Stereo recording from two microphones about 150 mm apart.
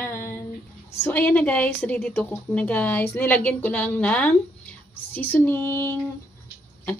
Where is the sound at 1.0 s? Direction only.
10° left (ahead or behind).